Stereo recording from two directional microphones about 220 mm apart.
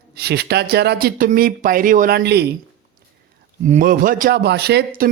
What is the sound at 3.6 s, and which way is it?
Speech, 35° right (ahead or behind).